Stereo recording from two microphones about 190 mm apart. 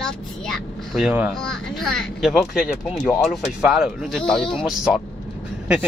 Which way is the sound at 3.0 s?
Centre (ahead or behind).